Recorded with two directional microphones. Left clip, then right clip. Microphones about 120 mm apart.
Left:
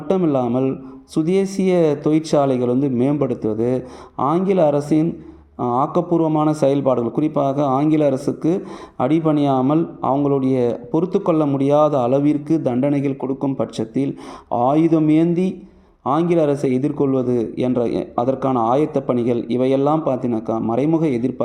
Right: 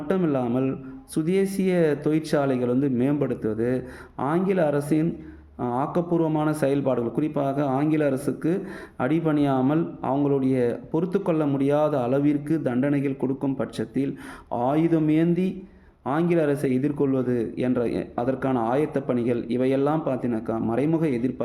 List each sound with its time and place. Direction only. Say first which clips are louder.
0.1 s a man's voice: left 6 dB; 25° left (ahead or behind)